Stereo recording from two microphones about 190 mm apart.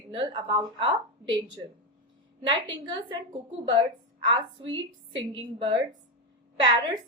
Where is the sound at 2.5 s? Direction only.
25° right (ahead or behind).